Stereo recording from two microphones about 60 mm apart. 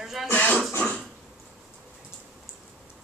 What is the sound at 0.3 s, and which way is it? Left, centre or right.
Throat clearing, left.